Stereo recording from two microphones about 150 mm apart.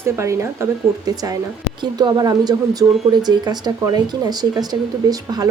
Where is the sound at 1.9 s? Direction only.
25° right (ahead or behind).